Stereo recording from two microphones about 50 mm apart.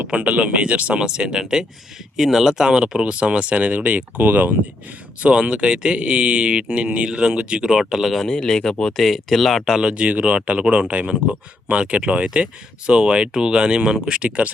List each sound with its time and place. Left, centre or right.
0.1 s speech: right
1.0 s speech: centre; by 4.5 s right
5.2 s speech: right
8.3 s speech: centre
9.7 s speech: right